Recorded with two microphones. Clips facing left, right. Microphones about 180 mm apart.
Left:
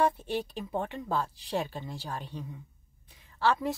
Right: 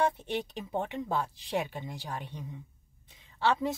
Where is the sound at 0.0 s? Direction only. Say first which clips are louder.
Left 1 dB; 20° right (ahead or behind).